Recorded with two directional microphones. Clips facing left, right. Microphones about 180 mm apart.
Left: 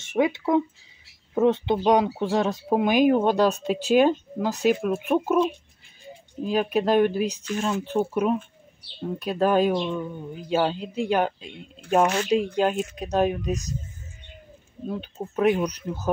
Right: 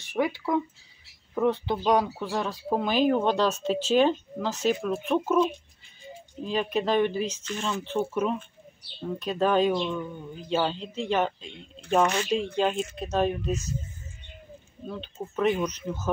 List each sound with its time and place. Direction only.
0.1 s speech: 25° left (ahead or behind)
14.9 s speech: 15° left (ahead or behind)